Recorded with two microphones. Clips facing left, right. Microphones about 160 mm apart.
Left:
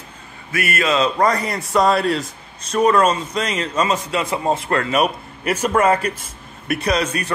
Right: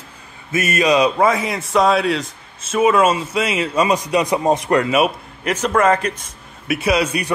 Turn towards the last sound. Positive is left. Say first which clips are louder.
# right 2 dB
turn(degrees=-10)  # may be behind; listen again after turning